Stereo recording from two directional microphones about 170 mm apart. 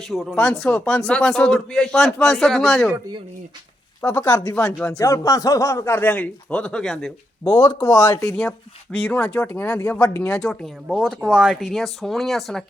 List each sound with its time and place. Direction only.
0.1 s speech: centre (ahead or behind)
4.0 s speech: 10° left (ahead or behind)
7.8 s speech: 25° left (ahead or behind); by 12.6 s centre (ahead or behind)